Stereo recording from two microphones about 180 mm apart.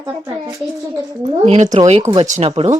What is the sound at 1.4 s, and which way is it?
Speech, 40° right (ahead or behind).